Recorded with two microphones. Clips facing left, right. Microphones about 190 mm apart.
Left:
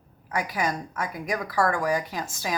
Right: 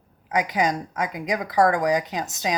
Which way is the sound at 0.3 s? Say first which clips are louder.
Right 5 dB; 20° right (ahead or behind).